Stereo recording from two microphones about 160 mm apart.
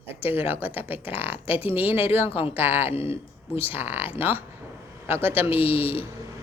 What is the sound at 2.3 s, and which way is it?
Speech, 35° left (ahead or behind).